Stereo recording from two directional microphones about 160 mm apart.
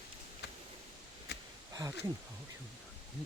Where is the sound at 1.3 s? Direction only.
90° left.